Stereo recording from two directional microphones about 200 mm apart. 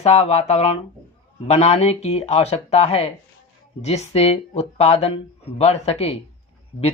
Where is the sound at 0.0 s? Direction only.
30° left (ahead or behind).